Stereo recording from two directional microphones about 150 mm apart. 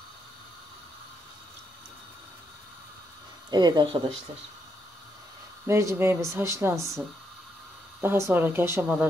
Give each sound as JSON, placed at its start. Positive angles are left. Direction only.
{"t": 3.4, "sound": "speech", "side_deg": -30}
{"t": 5.7, "sound": "speech", "side_deg": -20}
{"t": 8.0, "sound": "speech", "side_deg": -15}